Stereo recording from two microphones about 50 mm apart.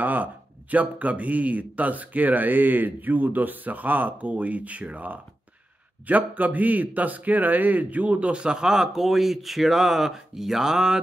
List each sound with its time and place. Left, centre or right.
0.0 s a man's voice: right; by 11.0 s centre